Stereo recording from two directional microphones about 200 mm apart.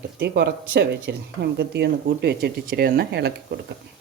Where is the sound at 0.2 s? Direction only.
55° right (ahead or behind).